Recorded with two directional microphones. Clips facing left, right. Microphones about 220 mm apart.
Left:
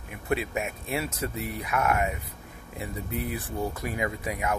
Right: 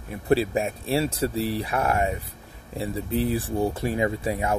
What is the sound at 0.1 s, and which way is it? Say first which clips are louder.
Speech: right 7 dB; 30° right (ahead or behind).